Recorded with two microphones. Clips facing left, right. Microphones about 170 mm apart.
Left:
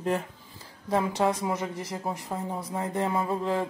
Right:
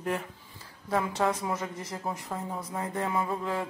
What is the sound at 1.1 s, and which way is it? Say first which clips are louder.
Speech: left 2 dB; 15° left (ahead or behind).